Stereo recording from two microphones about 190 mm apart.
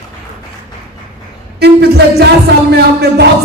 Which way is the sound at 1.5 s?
60° right (ahead or behind).